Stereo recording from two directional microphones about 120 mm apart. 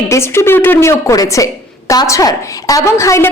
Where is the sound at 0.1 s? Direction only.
20° left (ahead or behind).